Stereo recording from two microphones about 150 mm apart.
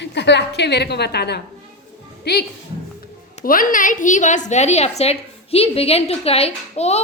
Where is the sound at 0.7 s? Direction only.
90° left.